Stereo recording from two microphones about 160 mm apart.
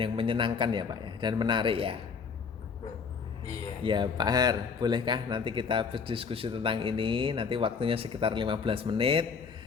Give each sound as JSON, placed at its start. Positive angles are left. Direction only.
{"t": 0.0, "sound": "a man's voice", "side_deg": -35}
{"t": 3.4, "sound": "a man's voice", "side_deg": -30}